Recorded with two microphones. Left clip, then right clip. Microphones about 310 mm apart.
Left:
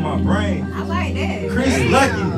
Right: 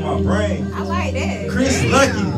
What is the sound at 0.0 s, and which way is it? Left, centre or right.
Speech, centre.